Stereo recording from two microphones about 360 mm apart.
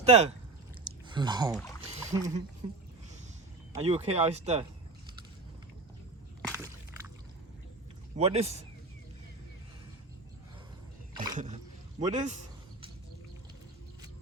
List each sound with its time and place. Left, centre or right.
0.0 s speech: centre
0.9 s a sound: centre
1.8 s rowboat: centre
2.6 s speech: centre
8.1 s speech: centre
11.1 s a sound: centre